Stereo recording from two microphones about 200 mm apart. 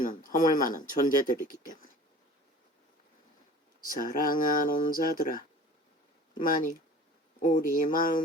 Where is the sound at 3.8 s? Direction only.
45° left (ahead or behind).